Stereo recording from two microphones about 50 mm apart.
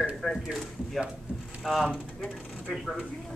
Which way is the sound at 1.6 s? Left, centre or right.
Centre.